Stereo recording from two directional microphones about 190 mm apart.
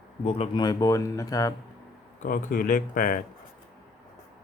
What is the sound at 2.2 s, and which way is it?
Speech, 45° left (ahead or behind).